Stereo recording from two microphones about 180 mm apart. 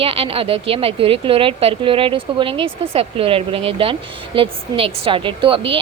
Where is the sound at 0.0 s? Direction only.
30° right (ahead or behind).